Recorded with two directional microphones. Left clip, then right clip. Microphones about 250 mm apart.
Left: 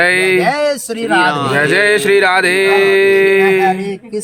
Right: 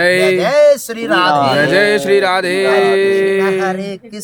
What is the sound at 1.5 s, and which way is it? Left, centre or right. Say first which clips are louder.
Speech: even; centre.